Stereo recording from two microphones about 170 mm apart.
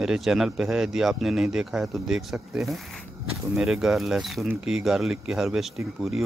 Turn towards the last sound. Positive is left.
turn(degrees=0)  # may be behind; listen again after turning